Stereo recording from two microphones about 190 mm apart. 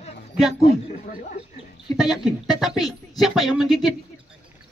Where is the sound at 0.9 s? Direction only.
45° left (ahead or behind).